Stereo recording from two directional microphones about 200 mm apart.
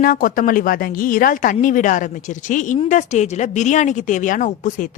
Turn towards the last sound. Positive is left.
turn(degrees=40)  # may be behind; listen again after turning